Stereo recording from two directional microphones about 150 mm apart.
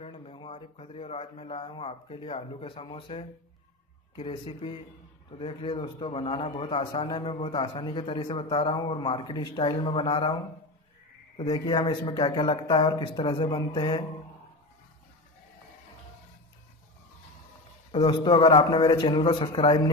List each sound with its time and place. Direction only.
0.0 s a man's voice: 40° left (ahead or behind)
17.9 s a man's voice: 35° left (ahead or behind)